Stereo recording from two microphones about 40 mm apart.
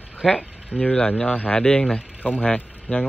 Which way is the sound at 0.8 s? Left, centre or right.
Left.